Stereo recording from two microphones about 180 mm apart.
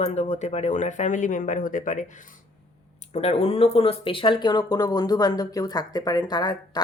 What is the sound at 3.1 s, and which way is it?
Speech, 35° left (ahead or behind).